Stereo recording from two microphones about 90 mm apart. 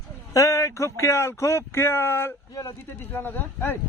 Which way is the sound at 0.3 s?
35° left (ahead or behind).